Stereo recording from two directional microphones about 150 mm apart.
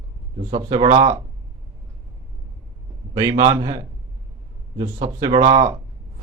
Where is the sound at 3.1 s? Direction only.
25° right (ahead or behind).